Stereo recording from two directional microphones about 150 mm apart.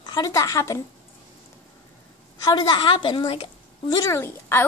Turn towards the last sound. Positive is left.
turn(degrees=15)  # may be behind; listen again after turning